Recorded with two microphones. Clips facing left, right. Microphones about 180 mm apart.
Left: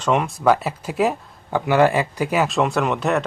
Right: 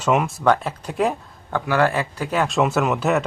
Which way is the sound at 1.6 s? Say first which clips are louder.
Left 3 dB; 15° left (ahead or behind).